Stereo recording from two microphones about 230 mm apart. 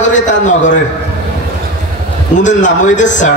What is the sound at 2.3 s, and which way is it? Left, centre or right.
Speech, left.